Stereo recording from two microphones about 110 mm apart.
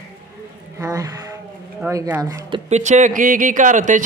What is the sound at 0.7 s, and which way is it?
Speech, 30° right (ahead or behind).